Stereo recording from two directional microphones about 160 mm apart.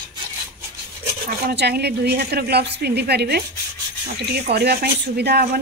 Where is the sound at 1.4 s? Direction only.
85° right.